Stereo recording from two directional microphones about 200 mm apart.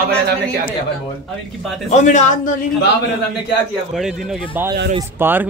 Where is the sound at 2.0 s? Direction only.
40° left (ahead or behind).